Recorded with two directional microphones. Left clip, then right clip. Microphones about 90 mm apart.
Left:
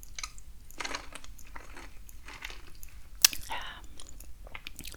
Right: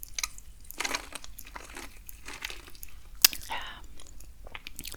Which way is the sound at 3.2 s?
10° right (ahead or behind).